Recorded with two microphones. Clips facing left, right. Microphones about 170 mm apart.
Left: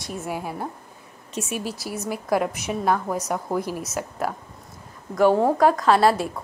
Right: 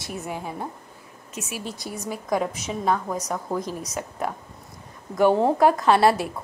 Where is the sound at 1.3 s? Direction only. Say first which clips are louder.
Left 5 dB; 30° left (ahead or behind).